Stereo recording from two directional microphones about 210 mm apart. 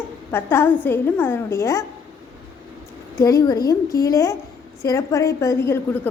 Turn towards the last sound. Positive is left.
turn(degrees=10)  # may be behind; listen again after turning